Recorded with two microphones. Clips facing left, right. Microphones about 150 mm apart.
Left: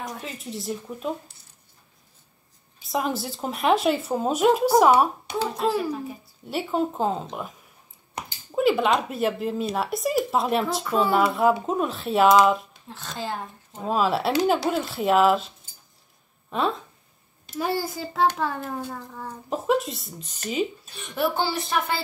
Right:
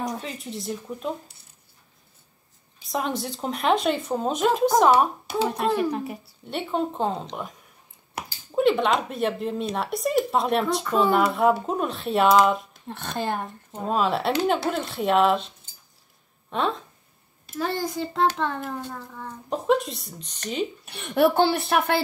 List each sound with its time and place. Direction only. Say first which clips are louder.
0.0 s speech: right 4 dB; centre (ahead or behind)
2.8 s speech: left 1 dB; centre (ahead or behind)
5.9 s a child's voice: right 2 dB; 70° right (ahead or behind)
6.5 s speech: left 1 dB; 5° left (ahead or behind)
8.5 s speech: even; 5° left (ahead or behind)
12.8 s a woman's voice: right 4 dB; 60° right (ahead or behind)
13.8 s speech: even; centre (ahead or behind)
16.4 s a sound: even; centre (ahead or behind)
17.6 s speech: even; 10° left (ahead or behind)
20.8 s a woman's voice: right 6 dB; 65° right (ahead or behind)